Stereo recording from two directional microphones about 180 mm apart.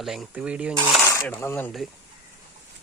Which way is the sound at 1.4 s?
10° left (ahead or behind).